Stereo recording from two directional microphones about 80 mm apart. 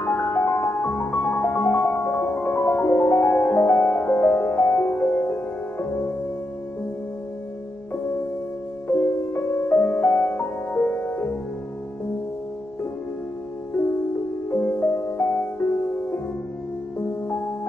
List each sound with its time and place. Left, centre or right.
0.0 s music: left
8.8 s music: left
14.5 s music: left